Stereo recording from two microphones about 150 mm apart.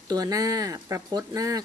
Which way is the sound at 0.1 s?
25° right (ahead or behind).